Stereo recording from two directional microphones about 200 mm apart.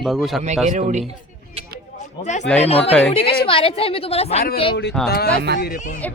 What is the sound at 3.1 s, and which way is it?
A woman's voice, 25° left (ahead or behind).